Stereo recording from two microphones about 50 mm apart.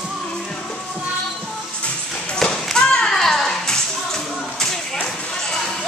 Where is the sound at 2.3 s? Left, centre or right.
Centre.